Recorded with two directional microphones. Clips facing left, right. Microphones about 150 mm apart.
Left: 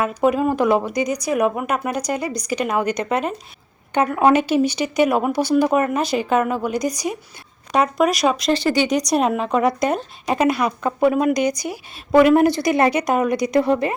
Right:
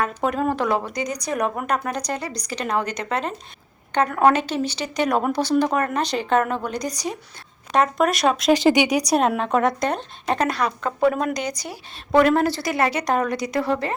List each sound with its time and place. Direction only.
0.0 s speech: 10° left (ahead or behind)
8.5 s speech: 15° right (ahead or behind); by 13.9 s 15° left (ahead or behind)